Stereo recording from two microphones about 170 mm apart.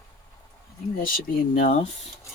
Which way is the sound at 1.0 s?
55° left (ahead or behind).